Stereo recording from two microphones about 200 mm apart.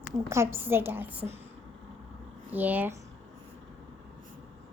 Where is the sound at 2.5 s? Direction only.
10° right (ahead or behind).